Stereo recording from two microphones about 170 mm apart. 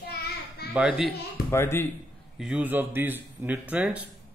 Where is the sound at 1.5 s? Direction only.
15° left (ahead or behind).